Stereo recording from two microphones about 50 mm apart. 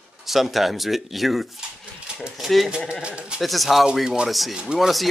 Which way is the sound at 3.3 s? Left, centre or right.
Centre.